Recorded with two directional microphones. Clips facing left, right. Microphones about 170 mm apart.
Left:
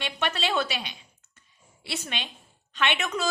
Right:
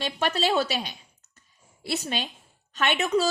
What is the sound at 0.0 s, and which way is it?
A woman's voice, 40° right (ahead or behind).